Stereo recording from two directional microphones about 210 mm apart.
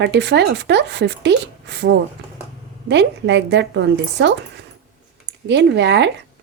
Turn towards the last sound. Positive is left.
turn(degrees=-55)  # may be behind; listen again after turning